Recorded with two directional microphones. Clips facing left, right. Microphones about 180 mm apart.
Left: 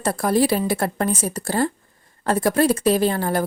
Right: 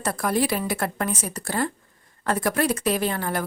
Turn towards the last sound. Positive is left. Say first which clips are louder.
# left 5 dB
turn(degrees=35)  # may be behind; listen again after turning